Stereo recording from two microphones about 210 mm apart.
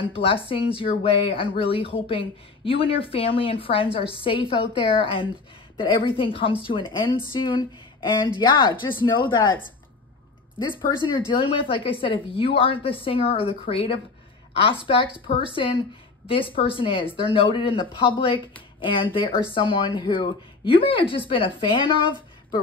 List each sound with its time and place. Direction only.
0.0 s speech: 25° left (ahead or behind)
11.1 s speech: 25° left (ahead or behind)